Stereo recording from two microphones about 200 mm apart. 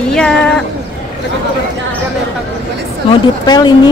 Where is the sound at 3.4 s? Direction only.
20° left (ahead or behind).